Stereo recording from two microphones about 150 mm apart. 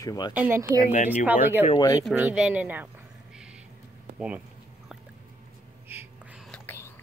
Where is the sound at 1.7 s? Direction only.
25° left (ahead or behind).